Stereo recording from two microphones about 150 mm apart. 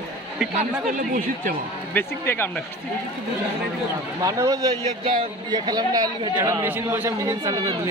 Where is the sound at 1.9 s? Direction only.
15° left (ahead or behind).